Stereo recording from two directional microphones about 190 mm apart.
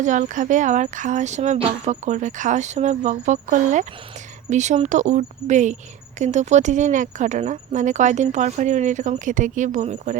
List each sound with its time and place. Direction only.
0.0 s speech: 40° right (ahead or behind)